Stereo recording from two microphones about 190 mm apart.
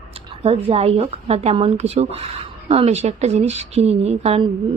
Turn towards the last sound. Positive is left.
turn(degrees=-30)  # may be behind; listen again after turning